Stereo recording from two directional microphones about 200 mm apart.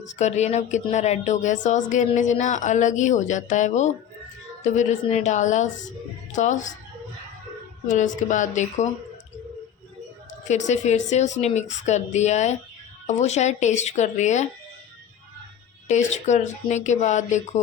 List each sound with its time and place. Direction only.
0.2 s speech: 35° left (ahead or behind)
7.9 s speech: 40° left (ahead or behind)
10.5 s speech: 35° left (ahead or behind)
15.9 s speech: 35° left (ahead or behind)